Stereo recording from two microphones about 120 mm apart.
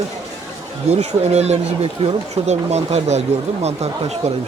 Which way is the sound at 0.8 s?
65° right (ahead or behind).